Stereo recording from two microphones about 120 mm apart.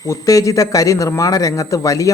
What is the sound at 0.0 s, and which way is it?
A man's voice, 30° left (ahead or behind).